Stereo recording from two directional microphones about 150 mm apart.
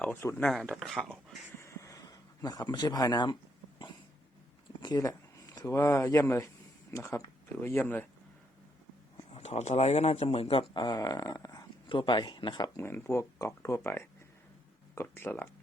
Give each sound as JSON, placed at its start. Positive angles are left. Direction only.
{"t": 0.0, "sound": "speech", "side_deg": 15}
{"t": 0.4, "sound": "speech", "side_deg": 5}
{"t": 1.5, "sound": "a sound", "side_deg": 20}
{"t": 4.8, "sound": "speech", "side_deg": 25}
{"t": 9.3, "sound": "speech", "side_deg": 45}